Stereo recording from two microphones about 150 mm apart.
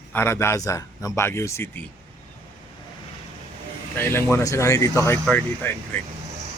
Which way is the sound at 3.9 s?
15° left (ahead or behind).